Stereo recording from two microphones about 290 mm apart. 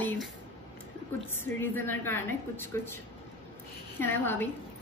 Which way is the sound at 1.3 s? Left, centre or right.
Centre.